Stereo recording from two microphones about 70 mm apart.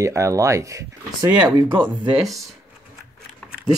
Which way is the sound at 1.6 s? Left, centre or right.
Right.